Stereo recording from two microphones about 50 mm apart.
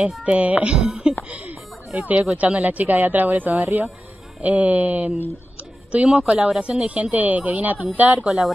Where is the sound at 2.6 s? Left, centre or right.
Right.